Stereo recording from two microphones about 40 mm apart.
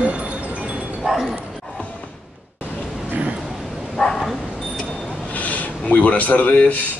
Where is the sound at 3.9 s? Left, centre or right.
Centre.